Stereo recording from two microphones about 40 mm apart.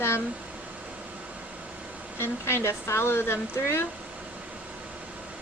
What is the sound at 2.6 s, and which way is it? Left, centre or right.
A woman's voice, left.